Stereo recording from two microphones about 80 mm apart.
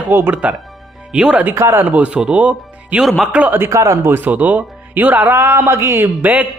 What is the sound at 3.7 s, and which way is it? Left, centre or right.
Speech, right.